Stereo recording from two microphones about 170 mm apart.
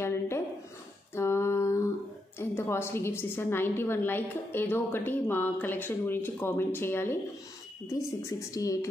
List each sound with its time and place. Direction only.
0.0 s a sound: 15° left (ahead or behind)
1.1 s female singing: 15° left (ahead or behind)
2.3 s a woman's voice: 15° left (ahead or behind)